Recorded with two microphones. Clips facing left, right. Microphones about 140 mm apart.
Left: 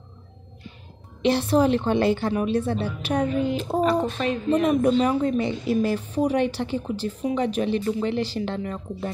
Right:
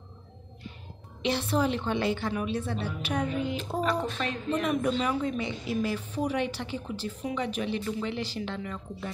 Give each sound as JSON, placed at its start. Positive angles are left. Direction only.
{"t": 1.2, "sound": "a woman's voice", "side_deg": 40}